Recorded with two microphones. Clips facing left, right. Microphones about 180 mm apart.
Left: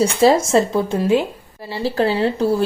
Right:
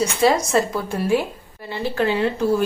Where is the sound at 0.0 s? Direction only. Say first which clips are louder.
Left 4 dB; 30° left (ahead or behind).